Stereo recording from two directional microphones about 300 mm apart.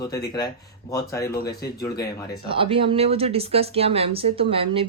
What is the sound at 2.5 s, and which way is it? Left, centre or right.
Speech, centre.